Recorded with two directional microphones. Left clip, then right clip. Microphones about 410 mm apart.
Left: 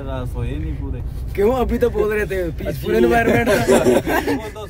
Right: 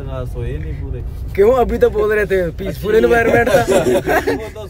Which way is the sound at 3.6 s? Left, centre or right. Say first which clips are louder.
Even; centre.